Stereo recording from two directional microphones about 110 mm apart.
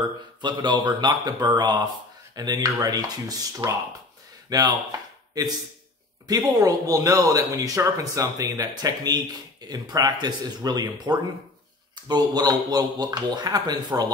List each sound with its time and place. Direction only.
0.4 s speech: 45° right (ahead or behind)
6.2 s speech: 35° right (ahead or behind)